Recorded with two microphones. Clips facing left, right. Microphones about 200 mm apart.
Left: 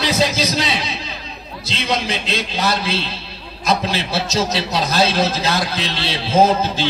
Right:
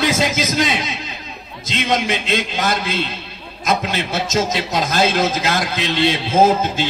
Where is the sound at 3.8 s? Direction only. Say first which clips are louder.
Even; 30° left (ahead or behind).